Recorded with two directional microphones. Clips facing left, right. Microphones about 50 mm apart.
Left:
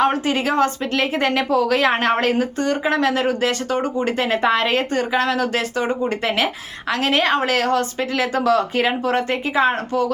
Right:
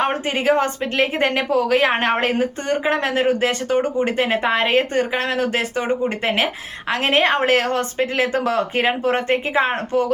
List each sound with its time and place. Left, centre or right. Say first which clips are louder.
0.0 s speech: left 1 dB; right